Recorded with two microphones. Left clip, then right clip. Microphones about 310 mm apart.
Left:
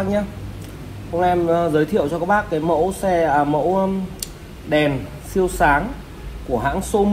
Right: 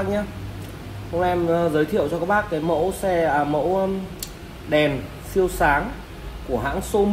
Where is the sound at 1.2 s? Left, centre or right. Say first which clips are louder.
Left 3 dB; centre.